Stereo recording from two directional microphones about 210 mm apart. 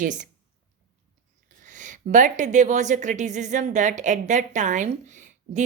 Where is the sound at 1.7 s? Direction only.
35° right (ahead or behind).